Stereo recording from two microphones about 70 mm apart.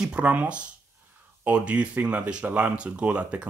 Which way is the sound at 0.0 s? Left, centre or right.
Centre.